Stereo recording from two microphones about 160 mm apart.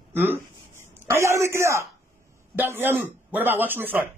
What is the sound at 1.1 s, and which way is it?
A man's voice, 15° right (ahead or behind).